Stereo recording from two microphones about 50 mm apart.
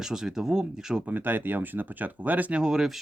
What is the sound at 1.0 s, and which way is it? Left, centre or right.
Speech, right.